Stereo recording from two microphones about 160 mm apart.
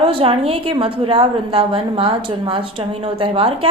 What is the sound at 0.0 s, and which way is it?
A woman's voice, 35° right (ahead or behind).